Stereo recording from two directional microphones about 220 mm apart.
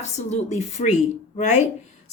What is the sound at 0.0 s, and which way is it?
A woman's voice, 30° left (ahead or behind).